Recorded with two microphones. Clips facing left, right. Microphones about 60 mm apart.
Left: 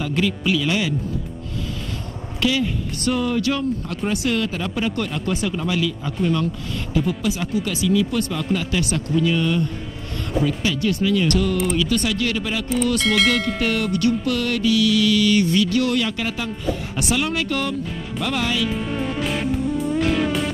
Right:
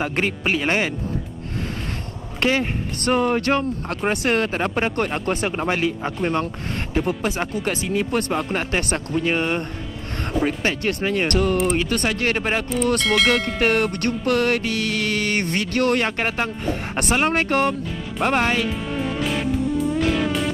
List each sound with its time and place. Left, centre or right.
0.0 s music: right
2.4 s music: right
13.0 s speech: centre
13.6 s music: right
18.7 s music: centre